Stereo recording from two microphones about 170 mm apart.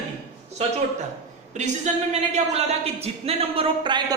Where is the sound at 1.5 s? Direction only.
45° right (ahead or behind); by 4.2 s 25° right (ahead or behind).